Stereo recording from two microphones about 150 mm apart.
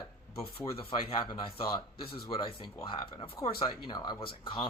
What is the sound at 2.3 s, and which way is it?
Speech, 35° left (ahead or behind).